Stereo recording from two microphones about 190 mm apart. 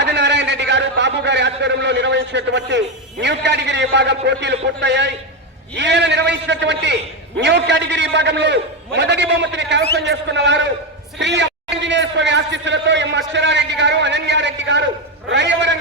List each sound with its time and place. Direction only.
0.0 s a man's voice: 65° right (ahead or behind)